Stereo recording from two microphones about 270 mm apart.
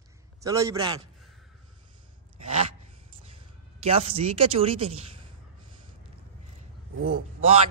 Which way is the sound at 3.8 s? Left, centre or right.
Right.